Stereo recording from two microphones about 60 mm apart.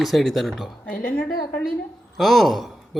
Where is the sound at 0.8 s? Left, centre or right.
Left.